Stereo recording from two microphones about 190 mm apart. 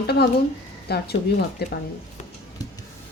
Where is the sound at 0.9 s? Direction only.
60° left (ahead or behind).